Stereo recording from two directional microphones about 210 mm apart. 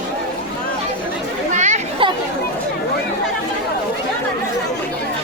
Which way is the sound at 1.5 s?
35° right (ahead or behind).